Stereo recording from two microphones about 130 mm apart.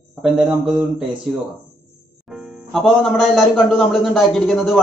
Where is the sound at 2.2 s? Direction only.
5° right (ahead or behind).